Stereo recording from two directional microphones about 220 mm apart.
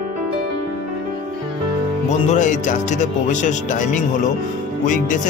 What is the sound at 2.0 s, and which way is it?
Speech, 35° left (ahead or behind).